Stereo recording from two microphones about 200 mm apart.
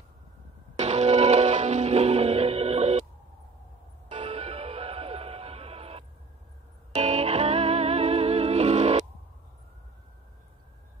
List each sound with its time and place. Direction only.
0.7 s music: 35° right (ahead or behind)
4.1 s music: 30° right (ahead or behind)